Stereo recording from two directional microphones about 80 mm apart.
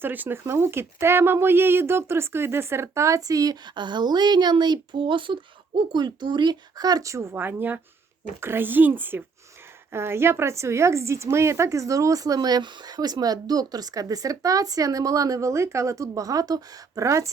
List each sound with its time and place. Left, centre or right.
0.0 s speech: right
3.8 s a woman's voice: right